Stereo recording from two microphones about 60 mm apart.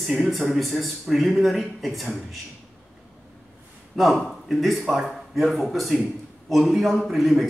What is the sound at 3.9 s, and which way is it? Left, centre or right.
A man's voice, centre.